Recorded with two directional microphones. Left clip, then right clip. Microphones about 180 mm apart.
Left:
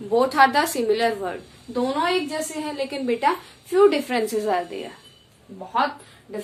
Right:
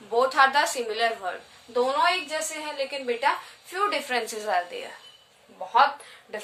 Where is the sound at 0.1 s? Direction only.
15° left (ahead or behind).